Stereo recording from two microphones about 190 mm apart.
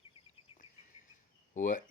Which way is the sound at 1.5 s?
45° left (ahead or behind).